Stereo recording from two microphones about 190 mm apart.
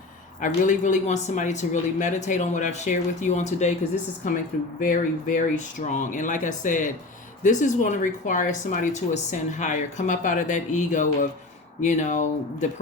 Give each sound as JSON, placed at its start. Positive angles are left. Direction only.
{"t": 0.4, "sound": "speech", "side_deg": 40}
{"t": 4.8, "sound": "speech", "side_deg": 45}